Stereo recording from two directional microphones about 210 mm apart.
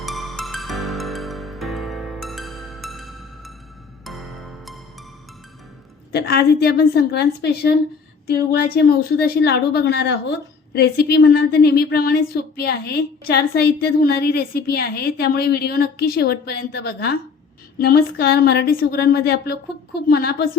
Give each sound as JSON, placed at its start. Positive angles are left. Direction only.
{"t": 0.0, "sound": "music", "side_deg": 0}
{"t": 6.1, "sound": "speech", "side_deg": 50}